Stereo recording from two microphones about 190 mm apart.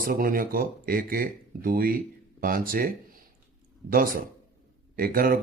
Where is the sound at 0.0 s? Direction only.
50° right (ahead or behind).